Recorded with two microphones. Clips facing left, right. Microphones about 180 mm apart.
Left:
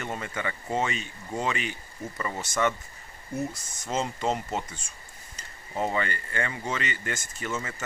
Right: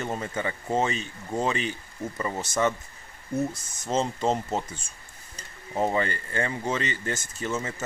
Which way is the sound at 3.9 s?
35° right (ahead or behind).